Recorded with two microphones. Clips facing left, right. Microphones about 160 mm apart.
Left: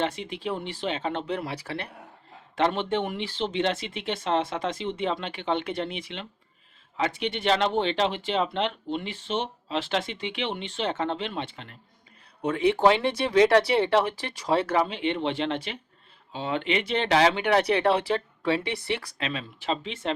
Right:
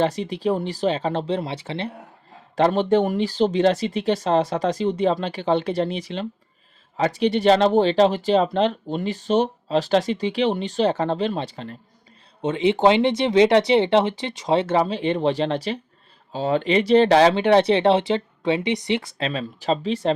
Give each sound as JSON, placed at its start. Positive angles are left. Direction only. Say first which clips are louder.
{"t": 0.0, "sound": "speech", "louder": "right 7 dB", "side_deg": -35}
{"t": 2.6, "sound": "speech", "louder": "right 7 dB", "side_deg": -40}
{"t": 12.4, "sound": "speech", "louder": "right 3 dB", "side_deg": -20}
{"t": 14.8, "sound": "speech", "louder": "right 5 dB", "side_deg": -35}
{"t": 19.2, "sound": "speech", "louder": "right 6 dB", "side_deg": -40}